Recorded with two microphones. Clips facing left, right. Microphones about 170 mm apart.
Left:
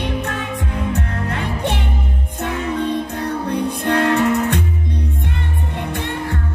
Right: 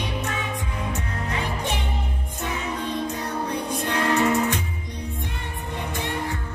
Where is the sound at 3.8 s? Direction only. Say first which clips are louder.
Left 5 dB; 65° left (ahead or behind).